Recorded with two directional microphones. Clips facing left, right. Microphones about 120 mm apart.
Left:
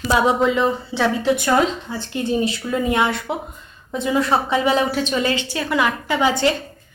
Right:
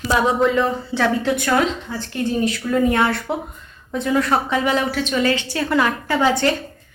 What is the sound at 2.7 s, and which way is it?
A woman's voice, 15° left (ahead or behind).